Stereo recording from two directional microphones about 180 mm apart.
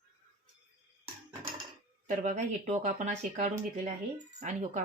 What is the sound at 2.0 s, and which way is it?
Speech, 40° right (ahead or behind).